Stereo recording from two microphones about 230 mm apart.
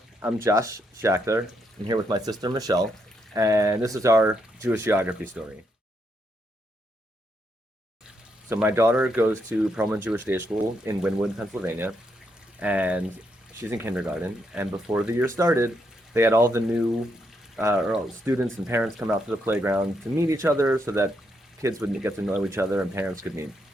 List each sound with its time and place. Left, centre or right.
0.4 s speech: centre
8.4 s speech: centre